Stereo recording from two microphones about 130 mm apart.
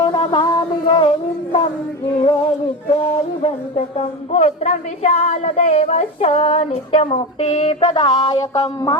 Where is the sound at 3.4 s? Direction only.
55° left (ahead or behind).